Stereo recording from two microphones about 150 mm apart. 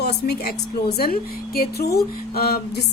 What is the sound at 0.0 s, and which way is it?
A woman's voice, 90° left.